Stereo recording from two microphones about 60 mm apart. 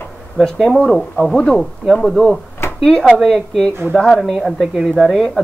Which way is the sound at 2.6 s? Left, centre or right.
Left.